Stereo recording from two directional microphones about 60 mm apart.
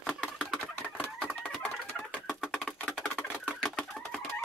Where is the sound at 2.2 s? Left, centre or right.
Centre.